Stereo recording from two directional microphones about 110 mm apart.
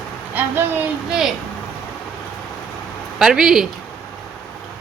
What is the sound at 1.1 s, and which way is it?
Speech, 5° right (ahead or behind).